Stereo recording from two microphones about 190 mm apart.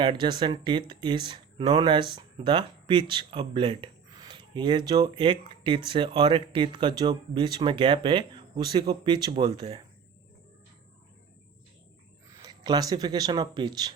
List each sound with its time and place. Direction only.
0.0 s speech: 25° right (ahead or behind)
12.3 s speech: 20° right (ahead or behind)